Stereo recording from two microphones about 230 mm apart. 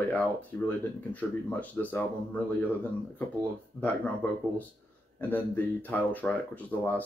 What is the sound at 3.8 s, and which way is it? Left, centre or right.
Speech, centre.